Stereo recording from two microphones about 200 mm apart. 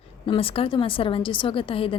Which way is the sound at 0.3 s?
30° left (ahead or behind).